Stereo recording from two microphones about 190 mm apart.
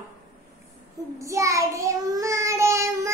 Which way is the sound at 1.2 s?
15° right (ahead or behind).